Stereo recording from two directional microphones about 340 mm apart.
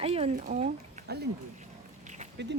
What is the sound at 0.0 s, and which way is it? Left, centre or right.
Speech, centre.